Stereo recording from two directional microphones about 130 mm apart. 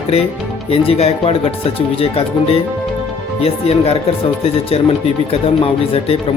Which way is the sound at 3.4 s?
50° left (ahead or behind).